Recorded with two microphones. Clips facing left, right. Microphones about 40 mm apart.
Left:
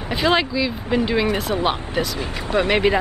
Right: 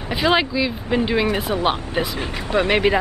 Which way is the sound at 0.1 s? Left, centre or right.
Centre.